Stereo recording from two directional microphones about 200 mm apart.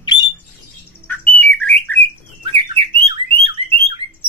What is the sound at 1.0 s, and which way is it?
Bird, 10° left (ahead or behind).